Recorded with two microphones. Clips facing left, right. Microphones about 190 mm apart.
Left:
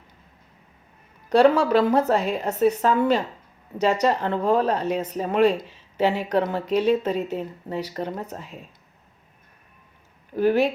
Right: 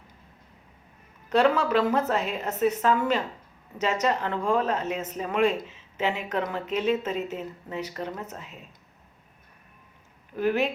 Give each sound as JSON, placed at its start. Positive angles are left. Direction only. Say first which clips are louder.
{"t": 1.6, "sound": "speech", "louder": "left 5 dB", "side_deg": 35}
{"t": 10.3, "sound": "speech", "louder": "left 5 dB", "side_deg": 35}